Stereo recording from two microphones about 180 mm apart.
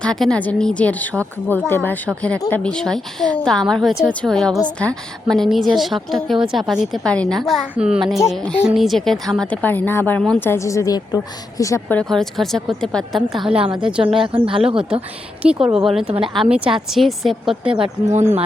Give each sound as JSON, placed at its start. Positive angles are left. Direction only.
{"t": 0.0, "sound": "a woman's voice", "side_deg": 5}
{"t": 13.6, "sound": "speech", "side_deg": -30}
{"t": 15.4, "sound": "a woman's voice", "side_deg": -5}